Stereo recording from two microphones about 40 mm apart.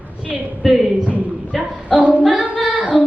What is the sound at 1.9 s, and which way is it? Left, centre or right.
Singing, centre.